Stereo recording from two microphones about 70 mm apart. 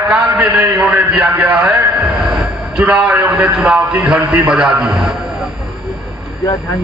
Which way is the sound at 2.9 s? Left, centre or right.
Centre.